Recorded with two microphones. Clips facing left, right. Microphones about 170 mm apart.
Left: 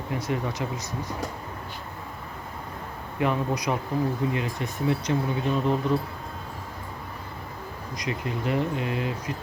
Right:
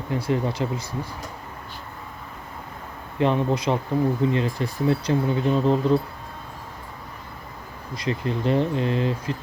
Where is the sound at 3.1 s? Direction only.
30° right (ahead or behind).